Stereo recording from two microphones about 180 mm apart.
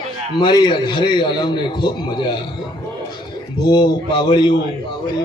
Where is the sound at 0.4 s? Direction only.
25° left (ahead or behind).